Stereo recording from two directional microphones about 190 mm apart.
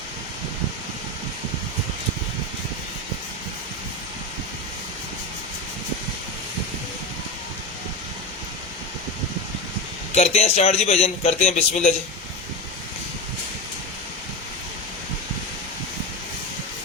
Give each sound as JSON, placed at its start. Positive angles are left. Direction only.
{"t": 10.2, "sound": "a man's voice", "side_deg": 35}